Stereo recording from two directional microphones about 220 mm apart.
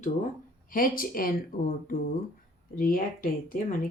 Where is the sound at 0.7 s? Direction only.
40° left (ahead or behind).